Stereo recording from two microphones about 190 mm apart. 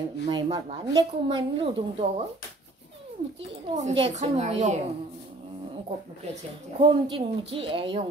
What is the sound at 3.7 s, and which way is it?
A woman's voice, 35° right (ahead or behind).